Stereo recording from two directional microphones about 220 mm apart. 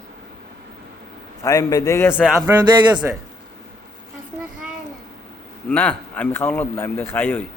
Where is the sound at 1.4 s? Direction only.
15° left (ahead or behind).